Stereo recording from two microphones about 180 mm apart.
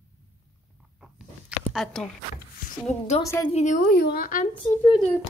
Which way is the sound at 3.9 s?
60° left (ahead or behind).